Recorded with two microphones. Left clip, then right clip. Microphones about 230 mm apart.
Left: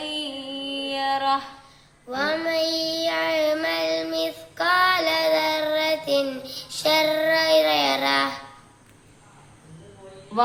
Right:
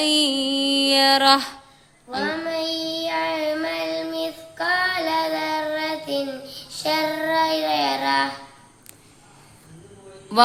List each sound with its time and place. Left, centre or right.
0.0 s music: right
2.0 s child singing: centre